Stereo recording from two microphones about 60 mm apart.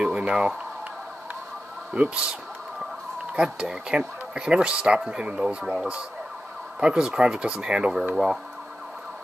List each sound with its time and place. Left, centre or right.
0.0 s a sound: centre
2.0 s speech: centre
3.3 s speech: centre